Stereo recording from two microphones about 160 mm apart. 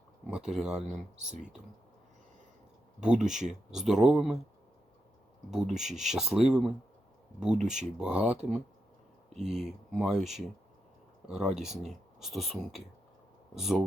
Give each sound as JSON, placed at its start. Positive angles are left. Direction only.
{"t": 0.3, "sound": "speech", "side_deg": -5}
{"t": 3.0, "sound": "speech", "side_deg": -5}
{"t": 5.5, "sound": "speech", "side_deg": -5}
{"t": 7.6, "sound": "speech", "side_deg": -50}
{"t": 7.9, "sound": "speech", "side_deg": -5}
{"t": 13.6, "sound": "speech", "side_deg": 0}